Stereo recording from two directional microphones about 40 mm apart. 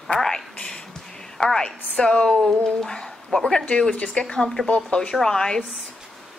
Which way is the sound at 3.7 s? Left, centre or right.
Left.